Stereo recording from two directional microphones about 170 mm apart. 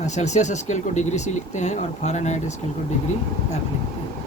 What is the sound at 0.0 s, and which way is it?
Speech, 45° left (ahead or behind).